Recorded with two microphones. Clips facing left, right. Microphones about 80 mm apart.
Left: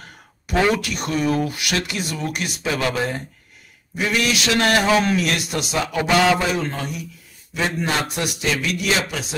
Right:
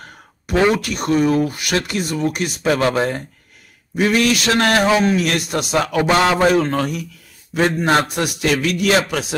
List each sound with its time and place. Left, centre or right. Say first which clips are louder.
0.7 s speech: right 6 dB; right
4.8 s speech: right 2 dB; right
5.2 s a man's voice: right 3 dB; right
5.9 s a man's voice: right 2 dB; right